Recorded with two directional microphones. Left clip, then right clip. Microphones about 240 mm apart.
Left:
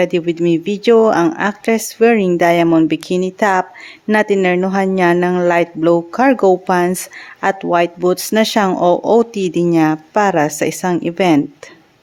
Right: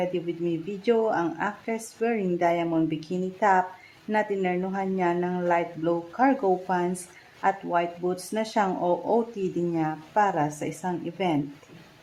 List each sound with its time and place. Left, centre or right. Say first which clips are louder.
0.0 s speech: left 13 dB; left